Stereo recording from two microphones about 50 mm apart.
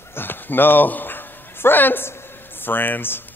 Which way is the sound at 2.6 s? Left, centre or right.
Left.